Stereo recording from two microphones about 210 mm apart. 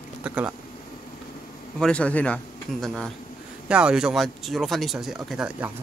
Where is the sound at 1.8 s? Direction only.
5° left (ahead or behind).